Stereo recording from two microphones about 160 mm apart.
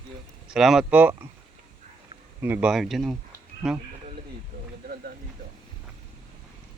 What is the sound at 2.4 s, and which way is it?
Speech, 10° right (ahead or behind).